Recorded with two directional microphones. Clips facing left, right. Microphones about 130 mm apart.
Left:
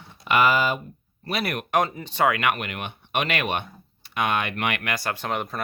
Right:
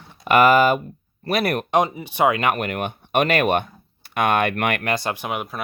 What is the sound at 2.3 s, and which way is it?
Speech, 35° right (ahead or behind).